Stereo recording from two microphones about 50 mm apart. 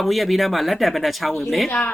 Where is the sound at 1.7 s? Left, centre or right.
Left.